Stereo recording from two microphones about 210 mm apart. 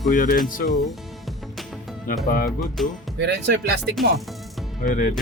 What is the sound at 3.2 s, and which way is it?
Speech, 55° right (ahead or behind).